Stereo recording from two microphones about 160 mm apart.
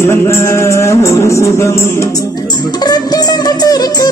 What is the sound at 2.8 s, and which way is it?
Music, 25° left (ahead or behind).